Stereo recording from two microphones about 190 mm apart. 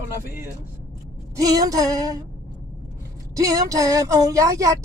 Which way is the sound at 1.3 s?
20° right (ahead or behind).